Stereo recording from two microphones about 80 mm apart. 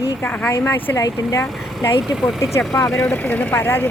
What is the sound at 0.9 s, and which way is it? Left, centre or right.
Speech, left.